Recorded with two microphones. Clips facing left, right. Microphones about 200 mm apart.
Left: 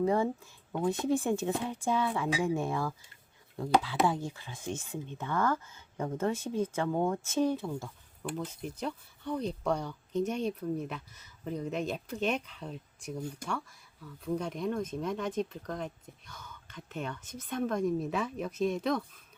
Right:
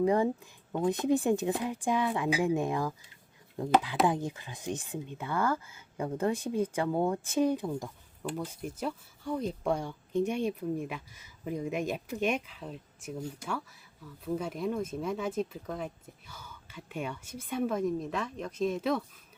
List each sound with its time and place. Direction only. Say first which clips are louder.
0.0 s speech: right 2 dB; 15° right (ahead or behind)
4.0 s speech: right 2 dB; 20° right (ahead or behind)